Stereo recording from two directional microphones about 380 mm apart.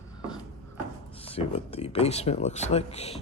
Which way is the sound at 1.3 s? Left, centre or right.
Centre.